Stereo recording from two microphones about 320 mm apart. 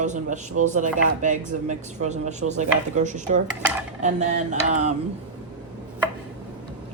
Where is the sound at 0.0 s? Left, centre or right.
Right.